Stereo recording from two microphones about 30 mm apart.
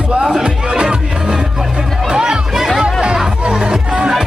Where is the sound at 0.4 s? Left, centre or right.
Right.